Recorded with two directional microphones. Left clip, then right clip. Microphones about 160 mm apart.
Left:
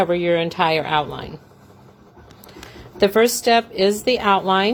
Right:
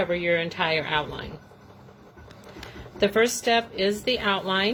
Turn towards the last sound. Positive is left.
turn(degrees=45)  # may be behind; listen again after turning